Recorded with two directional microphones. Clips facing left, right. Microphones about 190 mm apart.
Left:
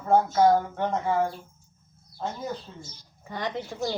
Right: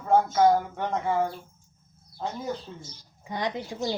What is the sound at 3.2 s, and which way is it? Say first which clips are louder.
Speech: right 1 dB; 15° right (ahead or behind).